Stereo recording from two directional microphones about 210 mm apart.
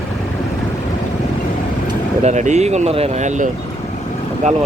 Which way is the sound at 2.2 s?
35° right (ahead or behind).